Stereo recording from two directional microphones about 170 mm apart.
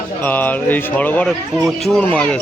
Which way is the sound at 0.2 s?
10° left (ahead or behind).